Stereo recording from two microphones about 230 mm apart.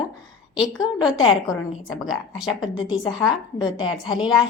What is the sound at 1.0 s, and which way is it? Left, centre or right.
A woman's voice, centre.